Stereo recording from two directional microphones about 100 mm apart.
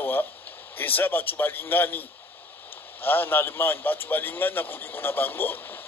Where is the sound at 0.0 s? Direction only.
20° left (ahead or behind).